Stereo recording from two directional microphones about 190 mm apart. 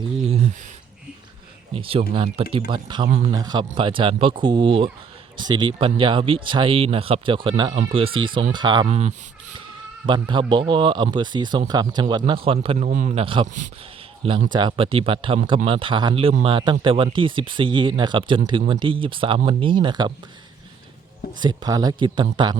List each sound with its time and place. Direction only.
0.3 s a sound: 35° right (ahead or behind)
1.7 s speech: 30° right (ahead or behind)
3.1 s a man's voice: 35° right (ahead or behind)
3.3 s speech: 20° right (ahead or behind)
8.9 s a man's voice: 35° right (ahead or behind)
10.1 s a man's voice: 25° right (ahead or behind)
21.3 s speech: 20° right (ahead or behind)